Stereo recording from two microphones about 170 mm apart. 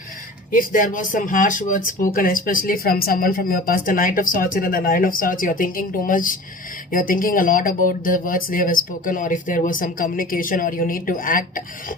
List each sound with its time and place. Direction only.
0.5 s speech: 55° left (ahead or behind)